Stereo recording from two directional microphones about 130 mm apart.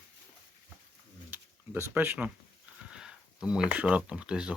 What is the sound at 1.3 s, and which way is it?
Speech, 15° right (ahead or behind).